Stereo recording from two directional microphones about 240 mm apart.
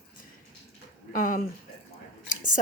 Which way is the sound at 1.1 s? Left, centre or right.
Left.